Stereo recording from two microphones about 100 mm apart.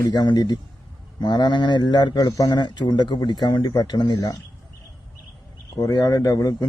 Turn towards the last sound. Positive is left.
turn(degrees=40)  # may be behind; listen again after turning